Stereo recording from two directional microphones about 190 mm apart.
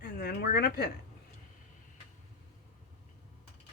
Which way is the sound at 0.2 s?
55° left (ahead or behind).